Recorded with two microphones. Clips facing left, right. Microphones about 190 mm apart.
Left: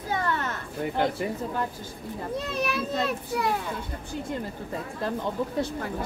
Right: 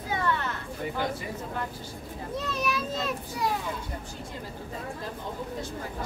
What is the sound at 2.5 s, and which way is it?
Speech, 60° left (ahead or behind).